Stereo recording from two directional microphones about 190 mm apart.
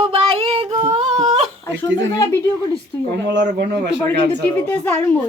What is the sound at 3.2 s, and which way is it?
Speech, 60° right (ahead or behind).